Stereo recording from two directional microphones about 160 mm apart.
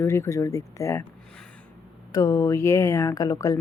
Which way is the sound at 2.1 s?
20° left (ahead or behind).